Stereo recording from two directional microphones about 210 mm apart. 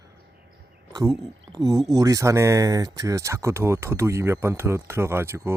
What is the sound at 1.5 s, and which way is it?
Speech, 15° right (ahead or behind).